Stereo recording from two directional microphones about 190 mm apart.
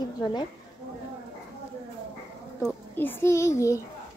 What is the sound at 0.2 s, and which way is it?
Speech, 20° left (ahead or behind).